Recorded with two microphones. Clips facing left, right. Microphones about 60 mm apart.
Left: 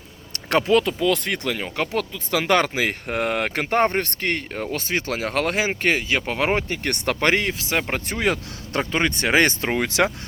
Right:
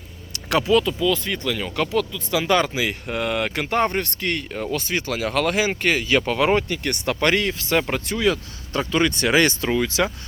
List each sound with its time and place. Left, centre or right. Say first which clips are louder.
0.3 s speech: even; left
1.5 s speech: right 3 dB; left
2.3 s speech: even; left
6.8 s speech: even; left
7.3 s speech: right 1 dB; left
7.9 s speech: right 2 dB; left
8.9 s speech: right 2 dB; left
9.7 s speech: left 1 dB; left